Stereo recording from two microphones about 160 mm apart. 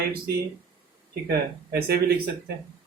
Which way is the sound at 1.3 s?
80° right.